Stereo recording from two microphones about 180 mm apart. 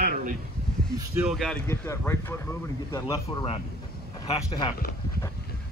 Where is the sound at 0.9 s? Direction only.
10° right (ahead or behind).